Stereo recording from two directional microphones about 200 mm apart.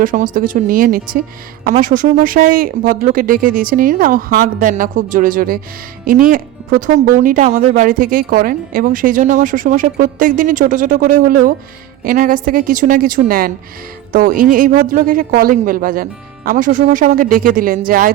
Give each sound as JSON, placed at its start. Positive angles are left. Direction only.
{"t": 0.0, "sound": "speech", "side_deg": -45}